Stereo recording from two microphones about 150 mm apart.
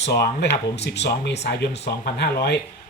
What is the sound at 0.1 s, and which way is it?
Speech, 90° left.